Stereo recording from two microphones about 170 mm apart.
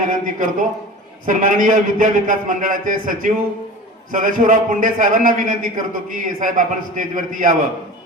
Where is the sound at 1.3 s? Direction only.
50° right (ahead or behind).